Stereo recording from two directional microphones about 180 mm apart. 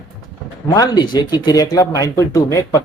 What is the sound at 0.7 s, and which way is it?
Speech, 20° left (ahead or behind).